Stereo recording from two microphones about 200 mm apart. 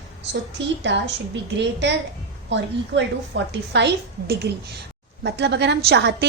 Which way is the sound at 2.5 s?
60° right (ahead or behind).